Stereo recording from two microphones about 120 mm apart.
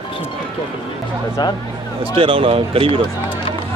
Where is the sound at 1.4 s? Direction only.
35° left (ahead or behind).